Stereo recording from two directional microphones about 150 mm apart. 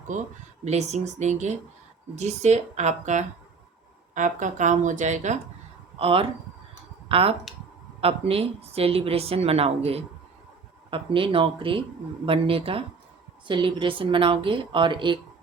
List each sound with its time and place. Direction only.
0.1 s speech: 55° right (ahead or behind)
6.0 s a woman's voice: 40° right (ahead or behind)